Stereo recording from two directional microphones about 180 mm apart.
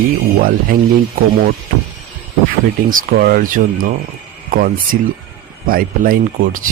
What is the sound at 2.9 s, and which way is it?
Speech, 50° right (ahead or behind).